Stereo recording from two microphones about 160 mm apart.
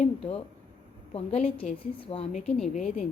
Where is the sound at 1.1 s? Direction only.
40° left (ahead or behind).